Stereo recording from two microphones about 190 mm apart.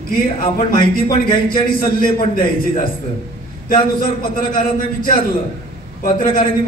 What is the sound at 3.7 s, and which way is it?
A man's voice, 50° left (ahead or behind).